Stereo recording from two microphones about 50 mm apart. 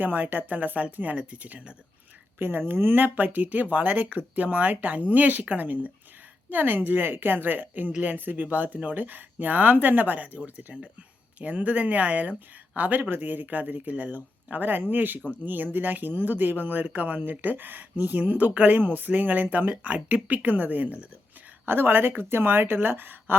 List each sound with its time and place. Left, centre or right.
0.0 s speech: right
2.4 s speech: right
21.7 s speech: right